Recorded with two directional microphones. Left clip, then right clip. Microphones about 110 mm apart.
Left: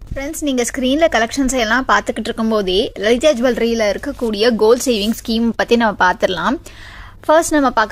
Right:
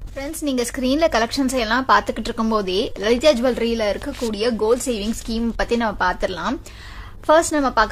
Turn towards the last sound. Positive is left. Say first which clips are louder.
# left 3 dB
turn(degrees=55)  # may be behind; listen again after turning